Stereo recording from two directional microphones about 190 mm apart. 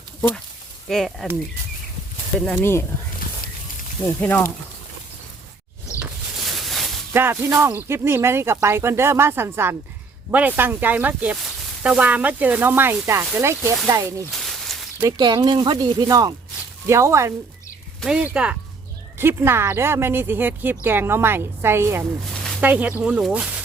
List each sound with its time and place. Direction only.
0.2 s speech: 10° left (ahead or behind)
2.5 s speech: 10° left (ahead or behind)
4.0 s speech: 10° left (ahead or behind)
6.0 s a sound: centre (ahead or behind)
7.1 s speech: 10° right (ahead or behind)
14.3 s a sound: centre (ahead or behind)
15.2 s speech: 25° right (ahead or behind)
18.0 s speech: 5° right (ahead or behind)